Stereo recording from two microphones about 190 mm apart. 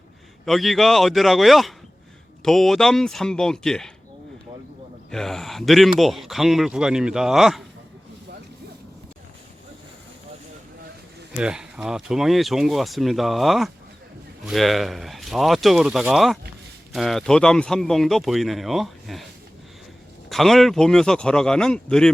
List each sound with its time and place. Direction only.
0.4 s speech: centre (ahead or behind)
5.1 s speech: centre (ahead or behind)
11.3 s speech: 5° right (ahead or behind)
20.3 s speech: centre (ahead or behind)